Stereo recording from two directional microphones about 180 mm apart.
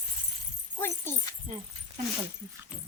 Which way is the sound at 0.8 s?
15° left (ahead or behind).